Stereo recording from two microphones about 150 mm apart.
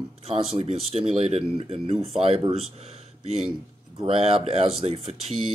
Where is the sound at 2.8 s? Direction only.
45° right (ahead or behind).